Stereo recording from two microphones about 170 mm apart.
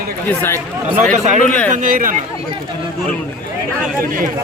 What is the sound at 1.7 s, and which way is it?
Speech, 50° right (ahead or behind).